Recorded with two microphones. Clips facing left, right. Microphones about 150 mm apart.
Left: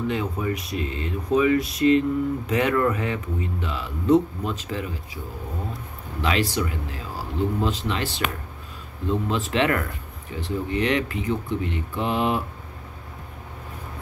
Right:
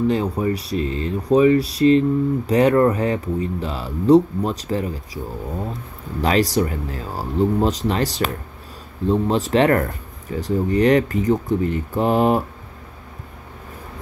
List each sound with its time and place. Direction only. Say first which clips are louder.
0.0 s speech: right 6 dB; 35° right (ahead or behind)
6.2 s speech: right 6 dB; 40° right (ahead or behind)